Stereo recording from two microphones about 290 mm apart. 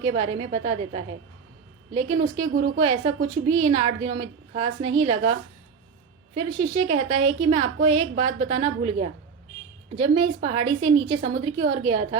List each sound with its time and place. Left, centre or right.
0.1 s a woman's voice: centre